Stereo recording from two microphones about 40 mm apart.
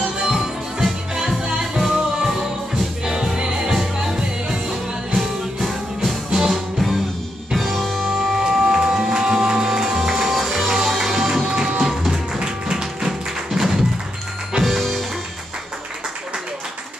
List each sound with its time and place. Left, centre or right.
0.2 s music: centre
1.8 s music: centre
8.1 s music: centre
11.9 s music: centre
12.4 s music: centre